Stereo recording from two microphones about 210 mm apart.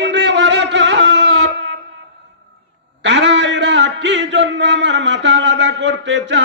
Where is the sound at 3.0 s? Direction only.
60° right (ahead or behind).